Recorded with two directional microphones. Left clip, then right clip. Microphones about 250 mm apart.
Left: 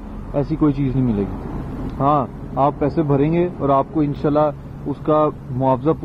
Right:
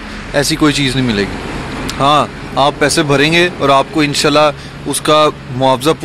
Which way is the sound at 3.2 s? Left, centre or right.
Centre.